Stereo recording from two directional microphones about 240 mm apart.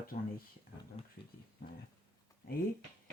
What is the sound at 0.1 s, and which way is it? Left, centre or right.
Speech, left.